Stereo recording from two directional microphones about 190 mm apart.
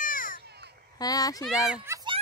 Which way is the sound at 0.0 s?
45° left (ahead or behind).